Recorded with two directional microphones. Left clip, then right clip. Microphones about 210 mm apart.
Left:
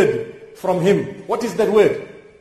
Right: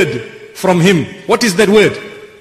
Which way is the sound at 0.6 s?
25° right (ahead or behind).